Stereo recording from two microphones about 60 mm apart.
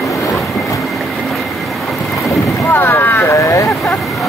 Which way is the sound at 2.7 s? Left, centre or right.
Left.